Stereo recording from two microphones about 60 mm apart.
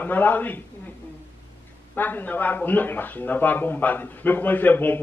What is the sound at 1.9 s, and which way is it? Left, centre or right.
A man's voice, left.